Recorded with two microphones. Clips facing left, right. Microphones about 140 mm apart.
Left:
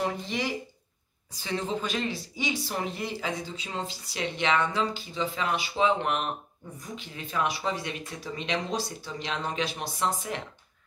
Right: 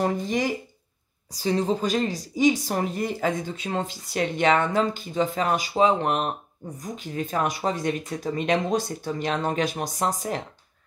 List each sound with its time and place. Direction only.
0.0 s speech: 45° right (ahead or behind)